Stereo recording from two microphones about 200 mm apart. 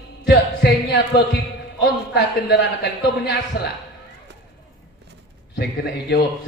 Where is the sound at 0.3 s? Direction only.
60° left (ahead or behind).